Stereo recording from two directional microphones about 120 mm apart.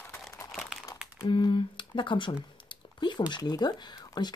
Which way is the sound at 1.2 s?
45° left (ahead or behind).